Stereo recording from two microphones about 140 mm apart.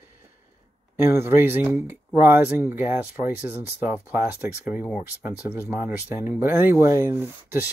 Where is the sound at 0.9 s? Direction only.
15° right (ahead or behind).